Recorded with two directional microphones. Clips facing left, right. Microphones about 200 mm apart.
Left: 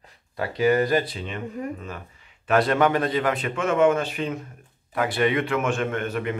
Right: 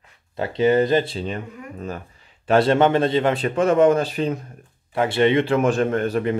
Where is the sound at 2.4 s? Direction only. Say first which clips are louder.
Right 4 dB; 30° right (ahead or behind).